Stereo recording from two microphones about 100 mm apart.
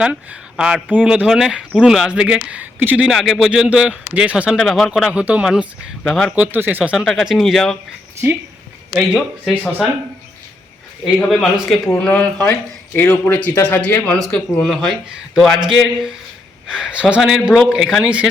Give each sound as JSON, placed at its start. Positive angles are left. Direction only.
{"t": 0.0, "sound": "speech", "side_deg": -10}
{"t": 3.1, "sound": "speech", "side_deg": -5}
{"t": 4.5, "sound": "speech", "side_deg": 0}
{"t": 6.0, "sound": "speech", "side_deg": 5}
{"t": 6.3, "sound": "speech", "side_deg": -15}
{"t": 6.9, "sound": "speech", "side_deg": 0}
{"t": 8.9, "sound": "speech", "side_deg": -5}
{"t": 11.3, "sound": "speech", "side_deg": 0}
{"t": 11.9, "sound": "speech", "side_deg": 15}